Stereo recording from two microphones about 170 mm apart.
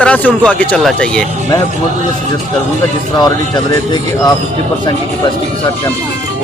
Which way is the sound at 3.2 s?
25° left (ahead or behind).